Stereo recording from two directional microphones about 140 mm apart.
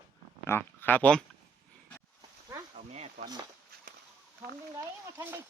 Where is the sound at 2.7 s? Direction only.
50° right (ahead or behind).